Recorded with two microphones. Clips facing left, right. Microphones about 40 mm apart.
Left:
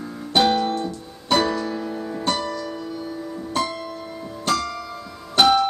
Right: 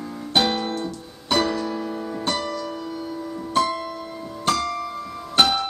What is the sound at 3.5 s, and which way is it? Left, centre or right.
Music, centre.